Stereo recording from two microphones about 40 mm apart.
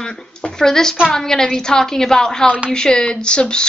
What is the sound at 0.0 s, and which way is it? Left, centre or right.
A woman's voice, centre.